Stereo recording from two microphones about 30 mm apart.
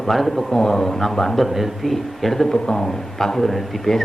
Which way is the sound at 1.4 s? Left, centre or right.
Centre.